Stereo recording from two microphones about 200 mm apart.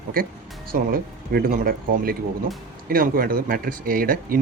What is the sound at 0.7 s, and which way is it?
Speech, 45° right (ahead or behind).